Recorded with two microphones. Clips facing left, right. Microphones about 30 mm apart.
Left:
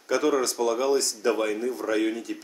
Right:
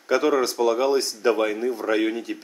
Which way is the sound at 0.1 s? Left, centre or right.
Right.